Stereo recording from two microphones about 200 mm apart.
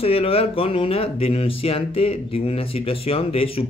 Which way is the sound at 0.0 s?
30° left (ahead or behind).